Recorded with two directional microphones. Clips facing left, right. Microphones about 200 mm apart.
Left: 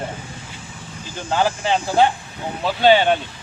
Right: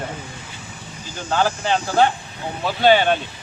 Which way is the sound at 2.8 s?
15° left (ahead or behind).